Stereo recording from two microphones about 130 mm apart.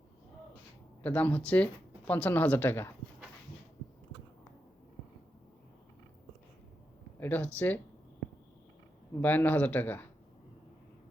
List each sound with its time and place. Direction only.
1.0 s speech: 10° left (ahead or behind)
7.2 s speech: 15° left (ahead or behind)
9.2 s speech: 15° left (ahead or behind)